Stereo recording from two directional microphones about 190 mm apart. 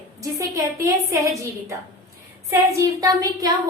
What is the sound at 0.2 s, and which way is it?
A woman's voice, 15° right (ahead or behind).